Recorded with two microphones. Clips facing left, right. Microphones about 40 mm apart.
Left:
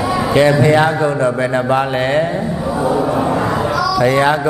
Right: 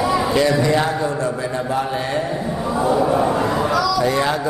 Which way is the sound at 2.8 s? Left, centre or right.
Centre.